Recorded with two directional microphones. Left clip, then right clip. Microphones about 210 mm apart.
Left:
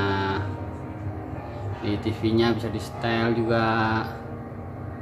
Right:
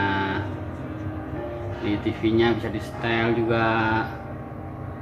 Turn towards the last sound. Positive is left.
turn(degrees=15)  # may be behind; listen again after turning